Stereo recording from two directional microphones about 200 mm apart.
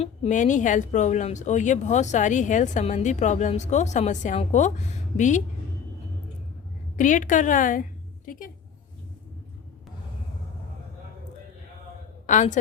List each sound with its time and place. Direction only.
0.0 s speech: 35° left (ahead or behind)
6.9 s a woman's voice: 40° left (ahead or behind)
12.2 s a woman's voice: 40° left (ahead or behind)